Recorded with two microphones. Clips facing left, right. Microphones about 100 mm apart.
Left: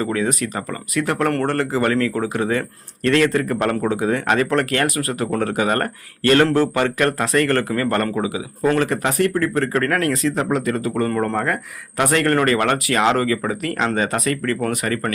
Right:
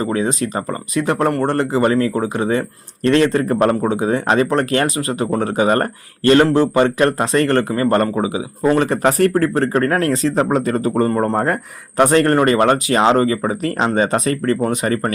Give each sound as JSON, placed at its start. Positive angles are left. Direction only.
{"t": 0.0, "sound": "speech", "side_deg": -25}